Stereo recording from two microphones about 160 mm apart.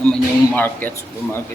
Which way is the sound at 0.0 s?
10° left (ahead or behind).